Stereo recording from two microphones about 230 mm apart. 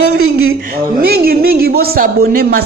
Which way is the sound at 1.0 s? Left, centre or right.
Right.